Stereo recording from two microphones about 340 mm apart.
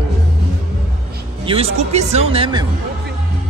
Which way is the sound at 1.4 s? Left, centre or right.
Centre.